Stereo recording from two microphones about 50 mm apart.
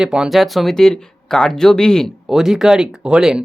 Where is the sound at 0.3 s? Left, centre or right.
Centre.